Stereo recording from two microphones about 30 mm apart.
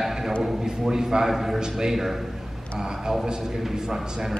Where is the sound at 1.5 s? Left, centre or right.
Right.